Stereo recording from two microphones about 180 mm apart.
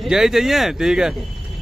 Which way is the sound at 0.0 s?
Centre (ahead or behind).